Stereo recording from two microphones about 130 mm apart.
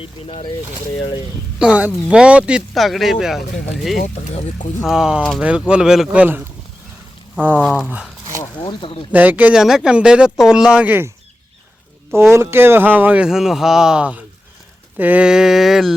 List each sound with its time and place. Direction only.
0.0 s speech: 45° left (ahead or behind)
1.5 s speech: 5° right (ahead or behind)
4.0 s speech: 65° left (ahead or behind)
4.9 s speech: 5° right (ahead or behind)
8.6 s speech: 40° left (ahead or behind)
9.1 s speech: 10° right (ahead or behind)
12.3 s speech: 20° right (ahead or behind); by 16.0 s centre (ahead or behind)